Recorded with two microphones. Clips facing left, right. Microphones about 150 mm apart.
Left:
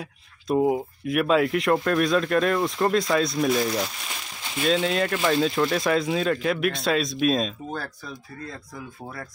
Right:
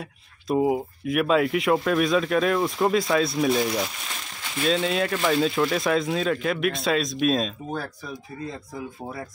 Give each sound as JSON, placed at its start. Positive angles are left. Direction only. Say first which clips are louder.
{"t": 0.0, "sound": "speech", "louder": "even", "side_deg": 0}
{"t": 7.8, "sound": "speech", "louder": "right 2 dB", "side_deg": -15}